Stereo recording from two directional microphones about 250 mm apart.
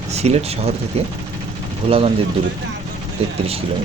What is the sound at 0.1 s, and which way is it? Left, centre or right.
Speech, right.